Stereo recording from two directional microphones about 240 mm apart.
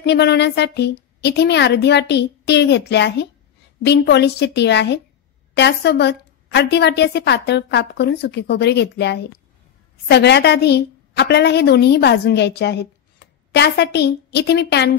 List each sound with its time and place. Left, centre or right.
0.0 s a woman's voice: left